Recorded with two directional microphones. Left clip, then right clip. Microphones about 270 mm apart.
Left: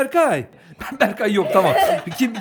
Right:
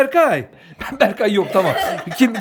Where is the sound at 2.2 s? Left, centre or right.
Centre.